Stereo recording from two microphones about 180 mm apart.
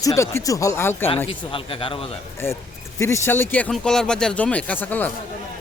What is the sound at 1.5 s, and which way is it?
Speech, 30° left (ahead or behind).